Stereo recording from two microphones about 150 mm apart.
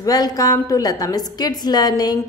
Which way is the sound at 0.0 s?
25° left (ahead or behind).